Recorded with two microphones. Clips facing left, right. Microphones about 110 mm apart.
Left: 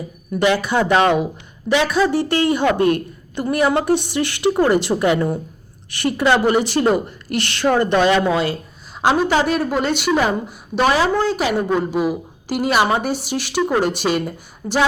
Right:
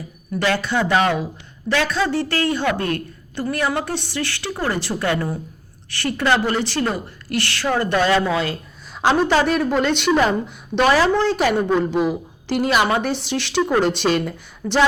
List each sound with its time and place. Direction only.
0.3 s a woman's voice: 15° left (ahead or behind)